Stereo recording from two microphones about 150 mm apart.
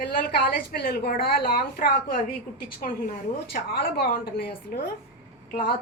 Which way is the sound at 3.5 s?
90° left.